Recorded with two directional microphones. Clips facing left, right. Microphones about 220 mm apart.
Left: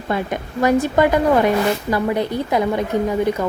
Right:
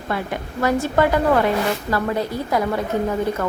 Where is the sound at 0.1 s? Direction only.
20° left (ahead or behind).